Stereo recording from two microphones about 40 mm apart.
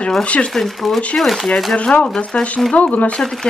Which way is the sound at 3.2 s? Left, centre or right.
Centre.